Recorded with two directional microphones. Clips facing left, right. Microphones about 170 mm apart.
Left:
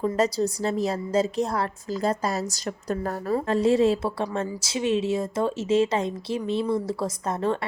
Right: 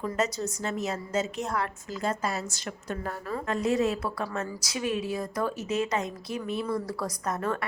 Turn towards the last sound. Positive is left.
turn(degrees=25)  # may be behind; listen again after turning